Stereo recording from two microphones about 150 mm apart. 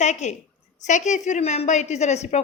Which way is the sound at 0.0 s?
50° left (ahead or behind).